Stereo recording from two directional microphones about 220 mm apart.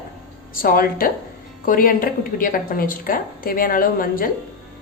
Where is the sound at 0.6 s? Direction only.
40° left (ahead or behind).